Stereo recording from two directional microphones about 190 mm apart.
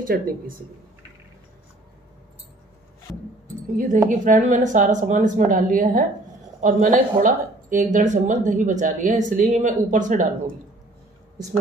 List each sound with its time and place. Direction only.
0.0 s speech: 50° right (ahead or behind)
3.7 s speech: 45° right (ahead or behind)